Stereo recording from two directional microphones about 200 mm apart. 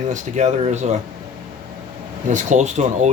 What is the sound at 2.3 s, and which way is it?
Speech, 35° right (ahead or behind).